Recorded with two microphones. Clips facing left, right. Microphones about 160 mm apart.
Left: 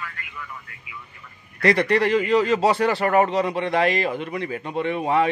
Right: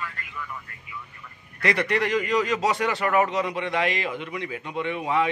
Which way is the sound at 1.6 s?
35° left (ahead or behind).